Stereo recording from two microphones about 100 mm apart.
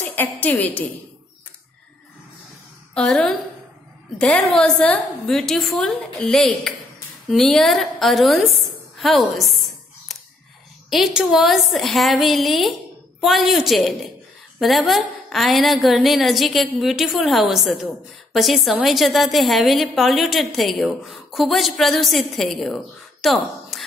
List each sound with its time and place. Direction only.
0.0 s a woman's voice: 20° left (ahead or behind)
2.9 s a woman's voice: 10° left (ahead or behind)
10.9 s a woman's voice: 5° right (ahead or behind)